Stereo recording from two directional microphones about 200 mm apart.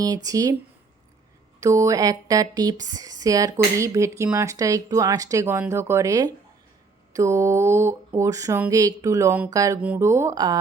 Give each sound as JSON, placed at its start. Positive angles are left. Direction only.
{"t": 0.0, "sound": "speech", "side_deg": -20}
{"t": 1.6, "sound": "speech", "side_deg": -15}